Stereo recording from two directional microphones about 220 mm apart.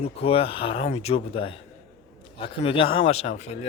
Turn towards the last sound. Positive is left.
turn(degrees=30)  # may be behind; listen again after turning